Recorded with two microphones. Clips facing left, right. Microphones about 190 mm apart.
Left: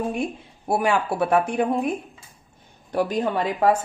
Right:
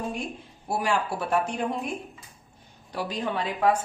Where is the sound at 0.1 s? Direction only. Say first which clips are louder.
Left 6 dB; 55° left (ahead or behind).